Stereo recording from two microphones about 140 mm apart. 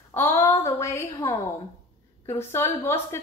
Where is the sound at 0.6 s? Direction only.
20° left (ahead or behind).